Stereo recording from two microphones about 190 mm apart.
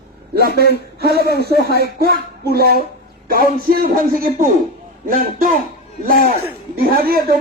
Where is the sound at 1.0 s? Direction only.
55° right (ahead or behind).